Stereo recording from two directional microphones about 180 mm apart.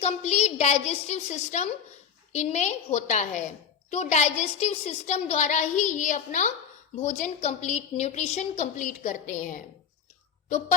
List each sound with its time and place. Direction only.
0.0 s a woman's voice: 35° left (ahead or behind)